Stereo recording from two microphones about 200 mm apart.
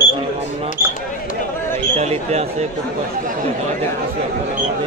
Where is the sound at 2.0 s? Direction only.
35° right (ahead or behind).